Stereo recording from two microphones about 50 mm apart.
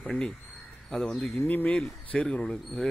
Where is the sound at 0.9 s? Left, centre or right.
Centre.